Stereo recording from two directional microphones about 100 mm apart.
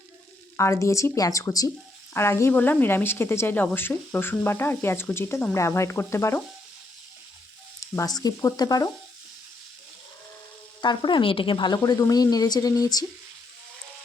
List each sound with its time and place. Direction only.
0.5 s a woman's voice: 30° left (ahead or behind)
7.8 s a woman's voice: 35° left (ahead or behind)
10.8 s a woman's voice: 50° left (ahead or behind)